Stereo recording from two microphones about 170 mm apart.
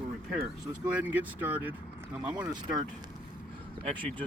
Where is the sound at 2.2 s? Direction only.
25° right (ahead or behind).